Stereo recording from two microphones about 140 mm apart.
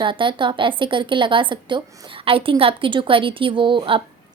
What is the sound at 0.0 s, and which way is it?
A woman's voice, 35° right (ahead or behind).